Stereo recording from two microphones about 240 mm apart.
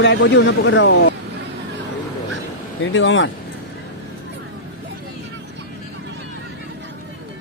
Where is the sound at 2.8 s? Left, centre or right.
Left.